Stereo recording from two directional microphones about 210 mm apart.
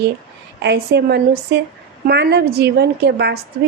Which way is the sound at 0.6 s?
50° right (ahead or behind).